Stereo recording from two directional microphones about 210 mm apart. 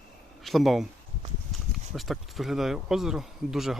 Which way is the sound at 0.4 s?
Centre (ahead or behind).